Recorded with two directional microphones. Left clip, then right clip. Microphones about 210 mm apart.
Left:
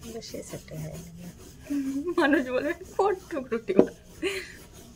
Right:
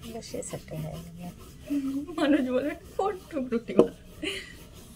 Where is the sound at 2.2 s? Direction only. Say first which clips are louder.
Left 1 dB; 50° left (ahead or behind).